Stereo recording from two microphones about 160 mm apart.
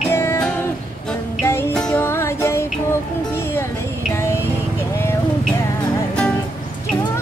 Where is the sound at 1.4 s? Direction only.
15° left (ahead or behind).